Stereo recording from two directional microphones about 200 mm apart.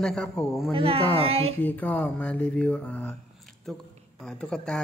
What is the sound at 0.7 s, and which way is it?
Speech, 30° right (ahead or behind).